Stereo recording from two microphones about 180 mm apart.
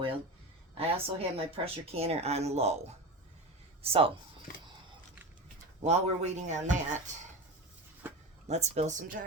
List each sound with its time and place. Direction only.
0.8 s speech: 30° right (ahead or behind)
3.8 s speech: 30° right (ahead or behind)
4.5 s a sound: 50° left (ahead or behind)
5.8 s speech: 40° right (ahead or behind)
8.0 s a sound: 10° right (ahead or behind)
8.4 s speech: 35° right (ahead or behind)